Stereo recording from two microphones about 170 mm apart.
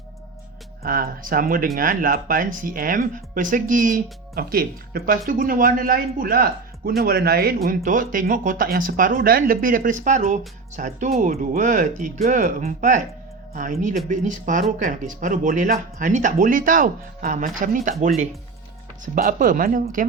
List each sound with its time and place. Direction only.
0.8 s speech: 60° right (ahead or behind)
19.0 s speech: 55° right (ahead or behind)